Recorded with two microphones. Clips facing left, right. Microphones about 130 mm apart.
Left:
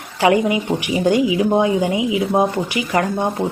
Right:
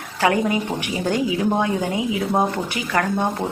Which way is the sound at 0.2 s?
15° left (ahead or behind).